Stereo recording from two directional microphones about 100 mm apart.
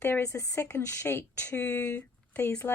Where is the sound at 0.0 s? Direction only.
25° left (ahead or behind).